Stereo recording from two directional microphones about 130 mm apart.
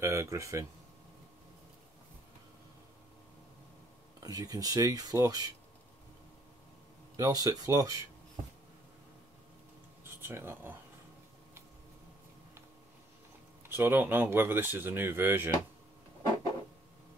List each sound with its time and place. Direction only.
0.0 s speech: 20° right (ahead or behind)
4.2 s speech: 30° right (ahead or behind)
7.2 s speech: 30° right (ahead or behind)
10.0 s speech: 15° right (ahead or behind)
13.7 s speech: 15° right (ahead or behind)